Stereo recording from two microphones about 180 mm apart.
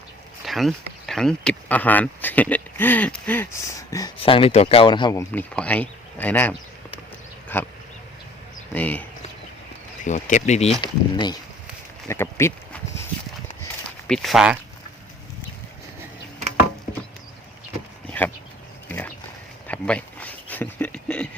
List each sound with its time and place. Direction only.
0.4 s speech: centre (ahead or behind); by 4.1 s 20° left (ahead or behind)
4.2 s speech: 30° left (ahead or behind)
5.3 s speech: 10° left (ahead or behind)
7.4 s duck: 10° left (ahead or behind)
8.7 s speech: 10° left (ahead or behind)
10.0 s speech: 45° left (ahead or behind); by 11.3 s 25° left (ahead or behind)
12.0 s a sound: 15° left (ahead or behind)
14.1 s speech: centre (ahead or behind)
18.2 s speech: 10° left (ahead or behind)
18.9 s pig: 10° left (ahead or behind)
19.6 s a sound: 5° left (ahead or behind)